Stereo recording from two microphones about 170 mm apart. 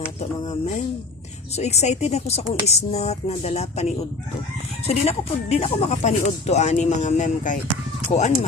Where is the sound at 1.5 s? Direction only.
40° left (ahead or behind).